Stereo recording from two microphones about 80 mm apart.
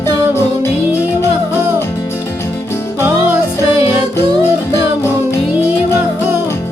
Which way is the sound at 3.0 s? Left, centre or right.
Right.